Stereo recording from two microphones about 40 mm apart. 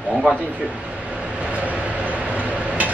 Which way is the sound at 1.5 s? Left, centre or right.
Right.